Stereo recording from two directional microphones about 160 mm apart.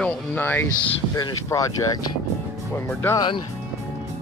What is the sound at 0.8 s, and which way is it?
Speech, 25° left (ahead or behind).